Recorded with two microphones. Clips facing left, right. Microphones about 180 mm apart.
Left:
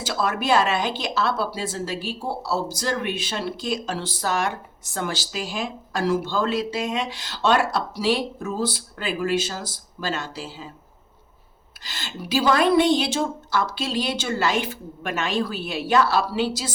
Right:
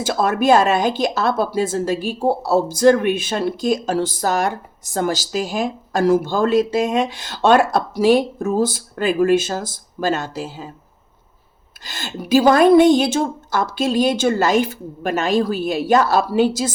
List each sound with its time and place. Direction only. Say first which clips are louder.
0.0 s speech: right 7 dB; 50° right (ahead or behind)
11.9 s speech: right 10 dB; 50° right (ahead or behind)